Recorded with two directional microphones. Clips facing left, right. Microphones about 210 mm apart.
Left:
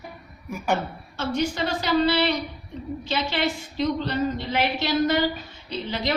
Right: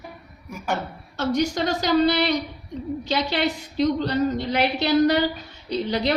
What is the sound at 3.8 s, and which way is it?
A woman's voice, 40° right (ahead or behind).